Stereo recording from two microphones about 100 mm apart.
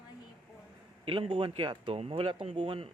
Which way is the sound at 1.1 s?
60° right (ahead or behind).